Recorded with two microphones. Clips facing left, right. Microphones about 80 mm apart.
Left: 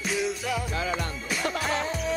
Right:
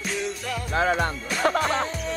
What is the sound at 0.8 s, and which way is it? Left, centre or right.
Music, right.